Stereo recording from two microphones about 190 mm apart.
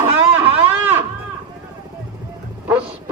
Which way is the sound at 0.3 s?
30° right (ahead or behind).